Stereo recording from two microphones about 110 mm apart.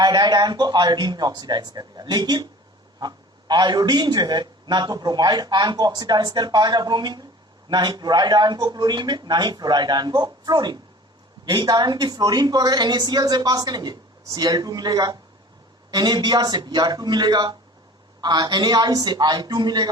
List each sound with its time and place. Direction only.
0.0 s a man's voice: 40° right (ahead or behind)